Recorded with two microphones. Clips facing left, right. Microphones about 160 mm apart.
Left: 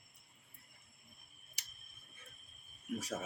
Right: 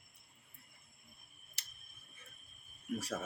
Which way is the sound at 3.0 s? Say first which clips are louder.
Even; 15° left (ahead or behind).